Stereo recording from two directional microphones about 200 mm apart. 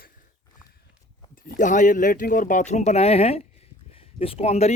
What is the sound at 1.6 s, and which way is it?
Speech, 40° left (ahead or behind).